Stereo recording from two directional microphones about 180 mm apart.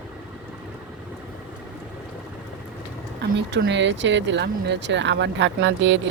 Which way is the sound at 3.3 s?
75° right (ahead or behind).